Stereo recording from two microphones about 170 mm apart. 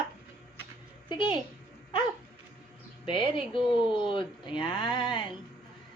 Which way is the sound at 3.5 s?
30° left (ahead or behind).